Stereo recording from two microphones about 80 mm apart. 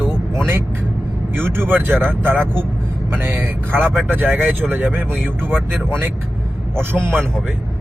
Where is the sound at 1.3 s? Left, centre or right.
Right.